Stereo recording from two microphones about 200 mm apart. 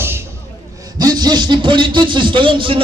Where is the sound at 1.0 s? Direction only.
20° right (ahead or behind).